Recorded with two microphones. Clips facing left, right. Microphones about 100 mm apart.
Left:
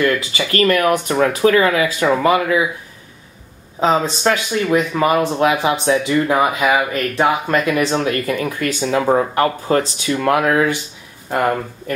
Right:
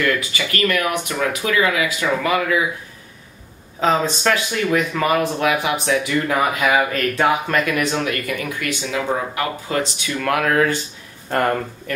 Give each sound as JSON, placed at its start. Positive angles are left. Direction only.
{"t": 0.0, "sound": "speech", "side_deg": 35}
{"t": 3.8, "sound": "speech", "side_deg": 20}
{"t": 11.2, "sound": "speech", "side_deg": 10}